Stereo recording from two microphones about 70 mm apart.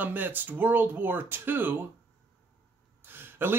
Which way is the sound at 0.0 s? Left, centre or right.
Right.